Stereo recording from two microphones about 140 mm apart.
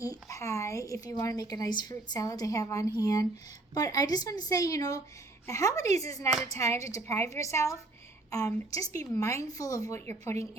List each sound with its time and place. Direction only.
0.0 s a woman's voice: 25° left (ahead or behind)